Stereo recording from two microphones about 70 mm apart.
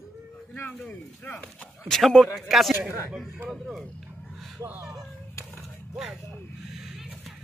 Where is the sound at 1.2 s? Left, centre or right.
Left.